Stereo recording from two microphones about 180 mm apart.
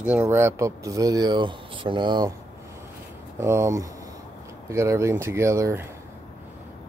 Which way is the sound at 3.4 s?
15° right (ahead or behind).